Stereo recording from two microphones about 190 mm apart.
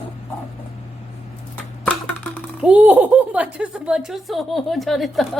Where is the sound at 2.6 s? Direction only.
5° right (ahead or behind).